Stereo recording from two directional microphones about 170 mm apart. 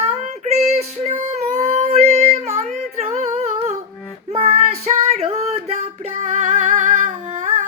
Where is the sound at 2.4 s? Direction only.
40° right (ahead or behind).